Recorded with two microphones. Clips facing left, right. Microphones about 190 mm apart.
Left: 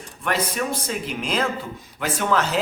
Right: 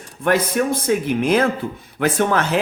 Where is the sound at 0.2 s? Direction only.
55° right (ahead or behind).